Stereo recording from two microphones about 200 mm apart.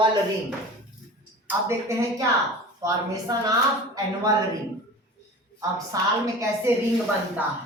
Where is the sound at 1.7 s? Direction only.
15° right (ahead or behind).